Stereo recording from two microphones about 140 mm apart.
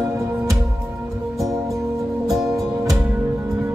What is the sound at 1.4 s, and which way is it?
Music, centre (ahead or behind).